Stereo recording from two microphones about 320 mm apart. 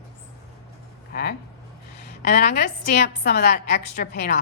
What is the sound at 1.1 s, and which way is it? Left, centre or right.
A woman's voice, left.